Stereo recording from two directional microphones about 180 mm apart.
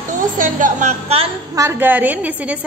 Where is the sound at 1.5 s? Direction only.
15° right (ahead or behind).